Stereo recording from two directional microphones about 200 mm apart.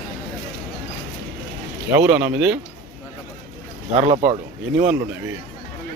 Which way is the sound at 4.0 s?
30° right (ahead or behind).